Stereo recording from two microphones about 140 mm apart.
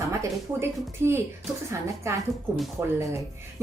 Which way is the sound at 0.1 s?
20° right (ahead or behind).